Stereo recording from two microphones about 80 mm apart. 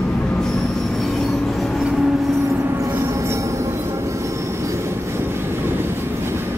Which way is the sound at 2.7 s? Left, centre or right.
Right.